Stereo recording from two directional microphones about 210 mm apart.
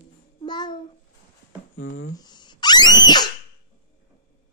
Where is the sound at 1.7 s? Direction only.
65° left (ahead or behind).